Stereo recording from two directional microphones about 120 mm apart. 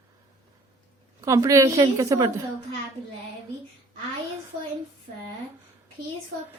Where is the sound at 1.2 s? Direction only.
25° right (ahead or behind).